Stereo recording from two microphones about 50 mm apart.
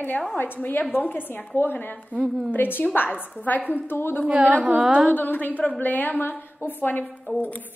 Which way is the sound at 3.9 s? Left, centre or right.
Left.